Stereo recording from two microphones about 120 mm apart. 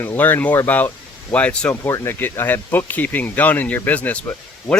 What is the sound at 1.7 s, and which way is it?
Speech, 20° left (ahead or behind).